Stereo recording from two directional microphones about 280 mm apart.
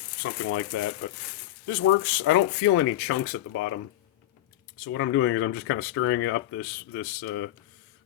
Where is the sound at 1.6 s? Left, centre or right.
Left.